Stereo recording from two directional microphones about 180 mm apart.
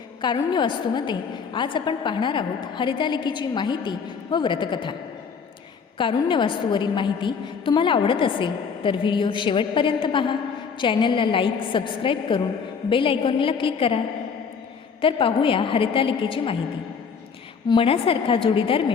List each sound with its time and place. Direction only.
0.2 s a woman's voice: 25° left (ahead or behind)
6.0 s a woman's voice: 30° left (ahead or behind)
15.0 s a woman's voice: 30° left (ahead or behind)
17.7 s a woman's voice: 30° left (ahead or behind)